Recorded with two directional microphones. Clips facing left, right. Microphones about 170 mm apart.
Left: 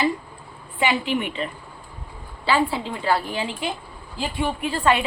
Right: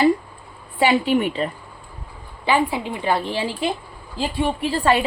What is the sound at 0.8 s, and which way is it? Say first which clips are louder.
Speech: right 5 dB; 35° right (ahead or behind).